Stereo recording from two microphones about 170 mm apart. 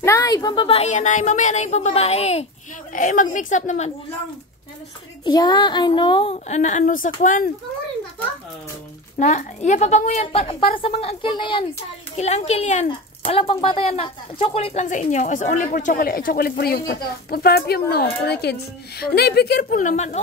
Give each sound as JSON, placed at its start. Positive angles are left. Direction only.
{"t": 0.0, "sound": "a woman's voice", "side_deg": 20}
{"t": 5.2, "sound": "child singing", "side_deg": 25}
{"t": 6.5, "sound": "speech", "side_deg": 45}
{"t": 9.2, "sound": "a woman's voice", "side_deg": 45}
{"t": 12.2, "sound": "a woman's voice", "side_deg": 40}
{"t": 19.8, "sound": "speech", "side_deg": 45}